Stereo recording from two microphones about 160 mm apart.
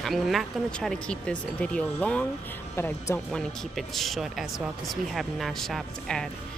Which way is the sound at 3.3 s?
Centre (ahead or behind).